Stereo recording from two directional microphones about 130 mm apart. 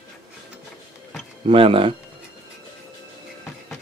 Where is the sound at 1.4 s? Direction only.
45° right (ahead or behind).